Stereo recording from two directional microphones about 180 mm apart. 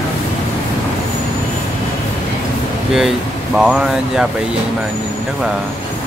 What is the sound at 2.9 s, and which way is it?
Speech, centre (ahead or behind).